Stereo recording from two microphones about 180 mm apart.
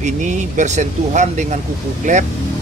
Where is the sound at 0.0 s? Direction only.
40° right (ahead or behind).